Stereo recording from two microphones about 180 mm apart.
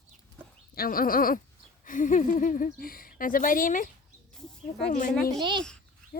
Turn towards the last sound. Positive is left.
turn(degrees=-25)  # may be behind; listen again after turning